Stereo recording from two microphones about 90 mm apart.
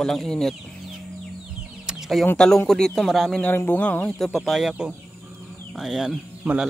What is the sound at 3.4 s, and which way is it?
Speech, 20° left (ahead or behind).